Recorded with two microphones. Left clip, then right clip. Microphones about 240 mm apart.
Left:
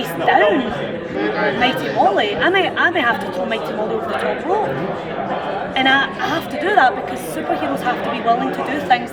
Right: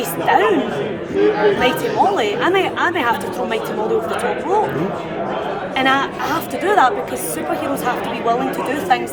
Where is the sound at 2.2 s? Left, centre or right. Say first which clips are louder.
Left 1 dB; centre.